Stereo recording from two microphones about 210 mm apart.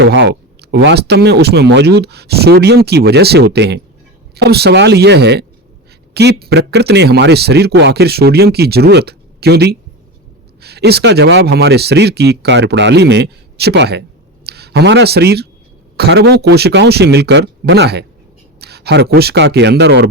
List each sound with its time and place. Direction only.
0.0 s speech: 60° right (ahead or behind)